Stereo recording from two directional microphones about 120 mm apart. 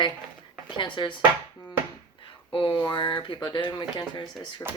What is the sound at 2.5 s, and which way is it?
Speech, 45° left (ahead or behind).